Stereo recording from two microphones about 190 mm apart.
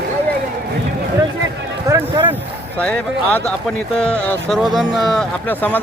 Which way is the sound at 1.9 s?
15° right (ahead or behind).